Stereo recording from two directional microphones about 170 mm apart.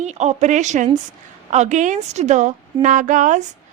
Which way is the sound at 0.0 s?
40° right (ahead or behind).